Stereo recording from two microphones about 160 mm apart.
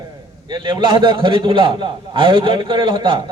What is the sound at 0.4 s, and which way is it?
A man's voice, 30° right (ahead or behind).